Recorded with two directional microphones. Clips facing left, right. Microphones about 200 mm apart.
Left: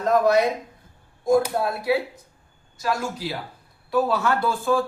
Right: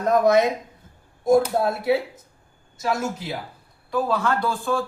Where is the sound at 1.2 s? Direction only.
25° right (ahead or behind).